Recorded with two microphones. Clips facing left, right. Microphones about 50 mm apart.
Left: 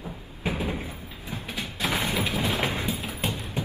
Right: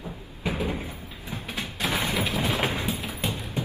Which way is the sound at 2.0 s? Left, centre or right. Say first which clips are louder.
Right 1 dB; right.